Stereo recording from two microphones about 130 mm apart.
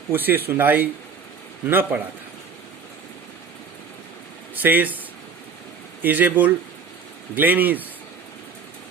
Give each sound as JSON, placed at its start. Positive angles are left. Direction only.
{"t": 0.1, "sound": "speech", "side_deg": -15}
{"t": 4.5, "sound": "speech", "side_deg": -15}
{"t": 6.0, "sound": "speech", "side_deg": -15}